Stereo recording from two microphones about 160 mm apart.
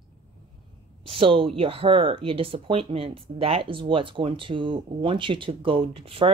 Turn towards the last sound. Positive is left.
turn(degrees=-35)  # may be behind; listen again after turning